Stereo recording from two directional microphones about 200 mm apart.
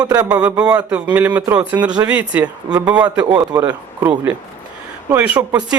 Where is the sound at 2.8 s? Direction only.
5° right (ahead or behind).